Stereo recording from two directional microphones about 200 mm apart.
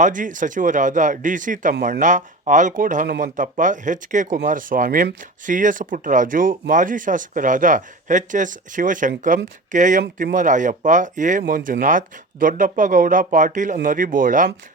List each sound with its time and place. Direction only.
0.0 s speech: 40° right (ahead or behind)